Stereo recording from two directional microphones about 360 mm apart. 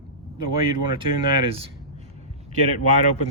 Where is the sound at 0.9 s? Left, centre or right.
Centre.